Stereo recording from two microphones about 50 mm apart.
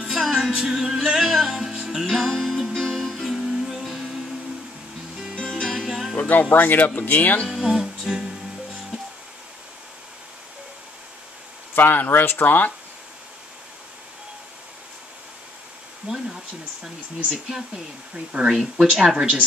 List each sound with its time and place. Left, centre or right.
0.2 s music: centre
0.5 s music: centre
3.5 s music: centre
3.8 s music: centre
5.5 s music: centre
6.1 s music: left
6.5 s speech: left
7.6 s speech: centre
11.7 s speech: left
17.3 s speech: centre
18.5 s speech: centre
19.1 s speech: right